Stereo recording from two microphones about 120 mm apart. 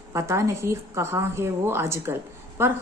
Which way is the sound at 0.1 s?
20° right (ahead or behind).